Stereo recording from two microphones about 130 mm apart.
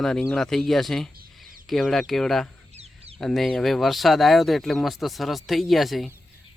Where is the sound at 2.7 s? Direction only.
50° right (ahead or behind).